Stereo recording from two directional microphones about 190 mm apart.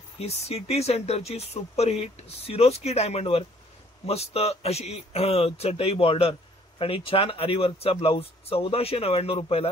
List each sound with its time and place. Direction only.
0.2 s speech: 35° left (ahead or behind)